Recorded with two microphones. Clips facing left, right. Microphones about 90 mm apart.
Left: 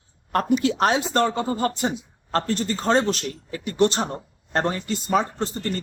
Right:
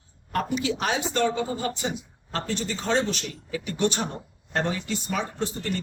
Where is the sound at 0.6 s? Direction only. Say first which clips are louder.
Left 6 dB; 45° left (ahead or behind).